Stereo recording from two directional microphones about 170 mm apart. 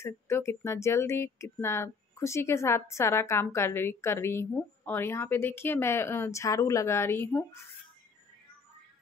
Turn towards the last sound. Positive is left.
turn(degrees=15)  # may be behind; listen again after turning